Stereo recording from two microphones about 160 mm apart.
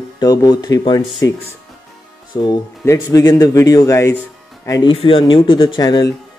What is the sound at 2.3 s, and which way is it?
Speech, 20° left (ahead or behind).